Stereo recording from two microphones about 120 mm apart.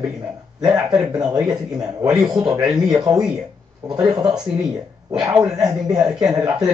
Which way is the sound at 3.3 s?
30° right (ahead or behind).